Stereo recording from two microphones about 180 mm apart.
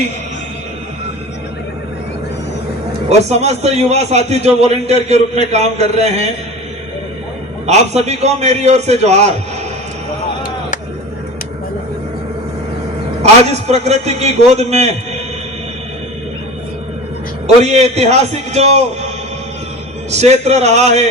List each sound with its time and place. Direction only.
3.1 s a man's voice: 35° right (ahead or behind)
7.7 s a man's voice: 40° right (ahead or behind)
13.5 s a man's voice: 35° right (ahead or behind)
17.4 s a man's voice: 35° right (ahead or behind)
20.1 s a man's voice: 40° right (ahead or behind)